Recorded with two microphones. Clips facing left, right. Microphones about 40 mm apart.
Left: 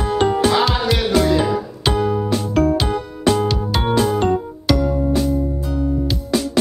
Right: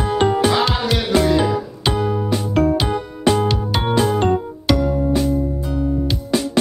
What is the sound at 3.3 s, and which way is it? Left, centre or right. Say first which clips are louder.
Music: even; right.